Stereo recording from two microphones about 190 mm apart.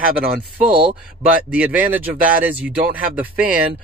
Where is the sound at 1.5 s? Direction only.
5° right (ahead or behind).